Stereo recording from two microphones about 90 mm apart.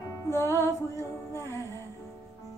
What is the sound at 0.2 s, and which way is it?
Music, 30° left (ahead or behind).